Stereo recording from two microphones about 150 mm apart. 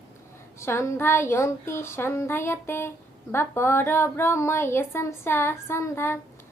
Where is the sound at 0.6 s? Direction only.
15° left (ahead or behind).